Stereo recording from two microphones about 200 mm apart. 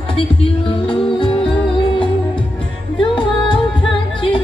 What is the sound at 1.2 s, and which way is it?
Music, 25° left (ahead or behind).